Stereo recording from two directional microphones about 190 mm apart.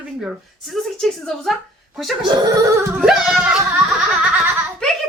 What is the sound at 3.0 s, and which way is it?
Music, 5° right (ahead or behind).